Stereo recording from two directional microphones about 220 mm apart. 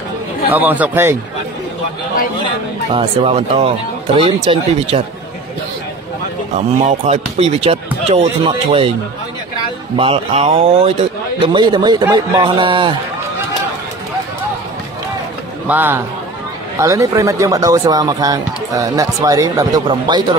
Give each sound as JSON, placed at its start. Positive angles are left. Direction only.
{"t": 0.5, "sound": "speech", "side_deg": -10}
{"t": 2.9, "sound": "speech", "side_deg": -25}
{"t": 7.1, "sound": "speech", "side_deg": -30}
{"t": 9.9, "sound": "speech", "side_deg": -25}
{"t": 15.6, "sound": "a man's voice", "side_deg": -10}